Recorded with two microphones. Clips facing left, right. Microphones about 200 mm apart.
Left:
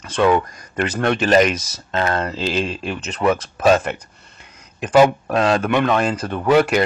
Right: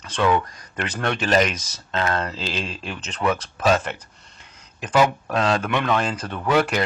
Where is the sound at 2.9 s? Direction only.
5° left (ahead or behind).